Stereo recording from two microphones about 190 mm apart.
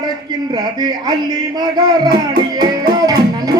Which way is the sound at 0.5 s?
20° right (ahead or behind).